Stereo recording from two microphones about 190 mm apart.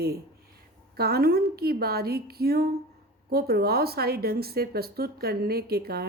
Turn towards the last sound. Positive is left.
turn(degrees=-55)  # may be behind; listen again after turning